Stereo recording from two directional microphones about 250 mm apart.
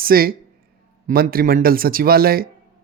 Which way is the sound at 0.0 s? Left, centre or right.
Right.